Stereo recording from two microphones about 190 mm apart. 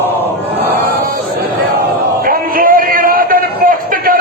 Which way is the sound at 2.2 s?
50° right (ahead or behind).